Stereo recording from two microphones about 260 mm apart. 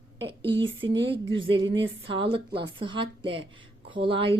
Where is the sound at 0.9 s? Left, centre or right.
Right.